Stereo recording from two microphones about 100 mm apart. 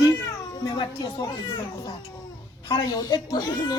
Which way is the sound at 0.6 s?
50° left (ahead or behind).